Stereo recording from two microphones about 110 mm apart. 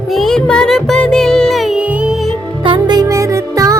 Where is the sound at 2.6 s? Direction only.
45° right (ahead or behind); by 3.7 s 30° right (ahead or behind).